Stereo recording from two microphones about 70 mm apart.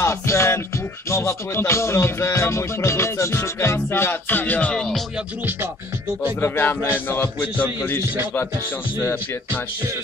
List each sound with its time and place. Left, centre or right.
0.0 s music: left
4.7 s music: centre
6.4 s speech: left
9.0 s speech: left